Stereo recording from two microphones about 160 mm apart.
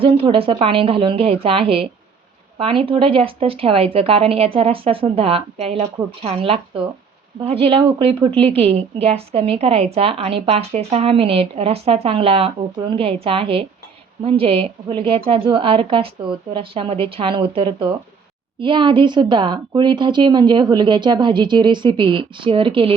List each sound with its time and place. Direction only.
0.0 s a woman's voice: 35° right (ahead or behind)